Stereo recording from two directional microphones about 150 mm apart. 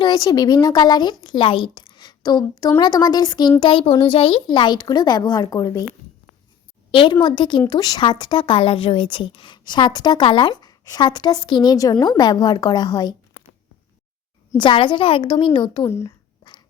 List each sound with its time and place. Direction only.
0.0 s a woman's voice: 25° left (ahead or behind)
6.9 s a woman's voice: 30° left (ahead or behind)
14.6 s a woman's voice: 35° left (ahead or behind)
15.8 s speech: 15° left (ahead or behind)
16.4 s a sound: 30° left (ahead or behind)